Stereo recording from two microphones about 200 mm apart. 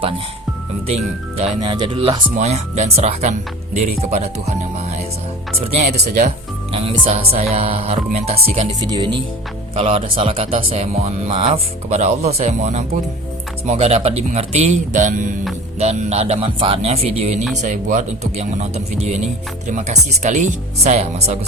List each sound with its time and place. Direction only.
1.6 s speech: 25° right (ahead or behind)
5.5 s speech: 35° right (ahead or behind)